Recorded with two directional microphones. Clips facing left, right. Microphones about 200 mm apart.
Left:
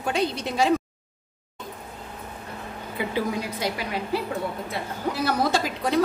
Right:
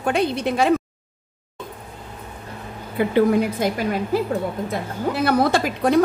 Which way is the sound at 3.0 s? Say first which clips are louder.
Right 10 dB; 50° right (ahead or behind).